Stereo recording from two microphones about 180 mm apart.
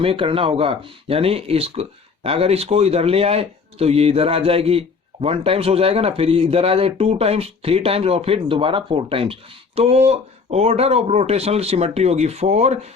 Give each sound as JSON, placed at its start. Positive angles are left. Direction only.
{"t": 0.0, "sound": "speech", "side_deg": -30}